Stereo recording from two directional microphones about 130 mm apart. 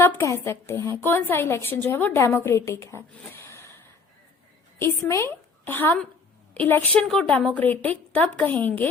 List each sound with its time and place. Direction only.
0.0 s a woman's voice: 20° left (ahead or behind)